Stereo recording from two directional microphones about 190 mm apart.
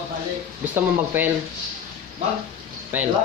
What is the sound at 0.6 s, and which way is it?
Speech, 10° right (ahead or behind).